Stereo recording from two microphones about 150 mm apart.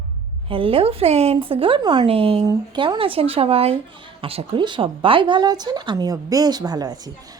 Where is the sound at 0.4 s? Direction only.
35° right (ahead or behind).